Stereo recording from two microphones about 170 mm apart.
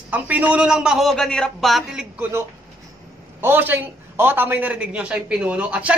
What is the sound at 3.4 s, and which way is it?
A man's voice, 10° right (ahead or behind).